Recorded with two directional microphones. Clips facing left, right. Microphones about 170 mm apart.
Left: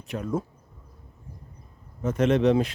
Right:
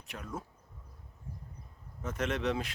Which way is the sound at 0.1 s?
30° left (ahead or behind).